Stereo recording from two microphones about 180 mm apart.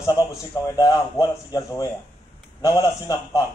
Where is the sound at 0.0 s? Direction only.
20° left (ahead or behind).